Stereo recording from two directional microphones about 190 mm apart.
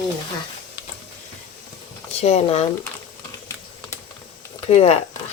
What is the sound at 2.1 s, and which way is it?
Speech, 35° left (ahead or behind).